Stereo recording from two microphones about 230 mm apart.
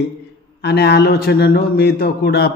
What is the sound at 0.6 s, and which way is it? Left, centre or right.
A man's voice, left.